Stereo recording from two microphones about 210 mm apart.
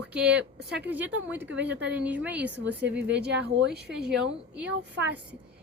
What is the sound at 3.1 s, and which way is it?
Speech, 55° right (ahead or behind).